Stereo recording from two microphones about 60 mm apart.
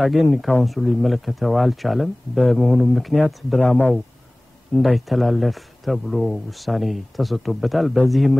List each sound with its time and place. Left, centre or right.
0.6 s speech: centre
3.6 s speech: left
4.7 s speech: centre